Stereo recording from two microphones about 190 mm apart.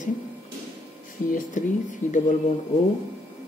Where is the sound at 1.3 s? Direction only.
45° left (ahead or behind).